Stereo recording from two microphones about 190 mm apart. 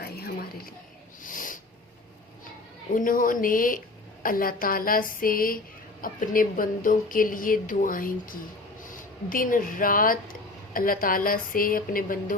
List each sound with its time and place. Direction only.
0.0 s a sound: 55° left (ahead or behind)
1.2 s owl: 45° left (ahead or behind)
2.9 s a woman's voice: 45° left (ahead or behind)